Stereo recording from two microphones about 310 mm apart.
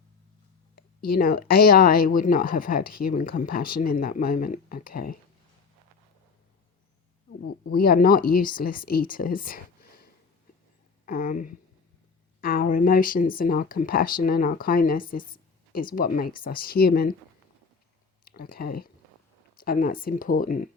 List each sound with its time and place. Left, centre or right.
0.8 s speech: left
7.7 s speech: left
11.0 s speech: left
18.3 s speech: left